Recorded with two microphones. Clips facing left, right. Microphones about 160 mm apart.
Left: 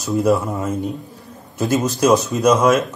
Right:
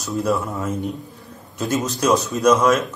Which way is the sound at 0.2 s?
20° left (ahead or behind).